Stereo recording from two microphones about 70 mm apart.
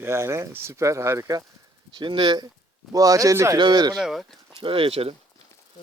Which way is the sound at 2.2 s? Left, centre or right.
Right.